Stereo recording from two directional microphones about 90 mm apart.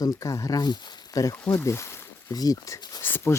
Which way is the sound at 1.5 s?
30° left (ahead or behind).